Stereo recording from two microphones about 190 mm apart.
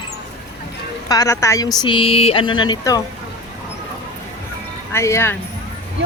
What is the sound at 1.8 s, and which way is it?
Speech, 25° left (ahead or behind).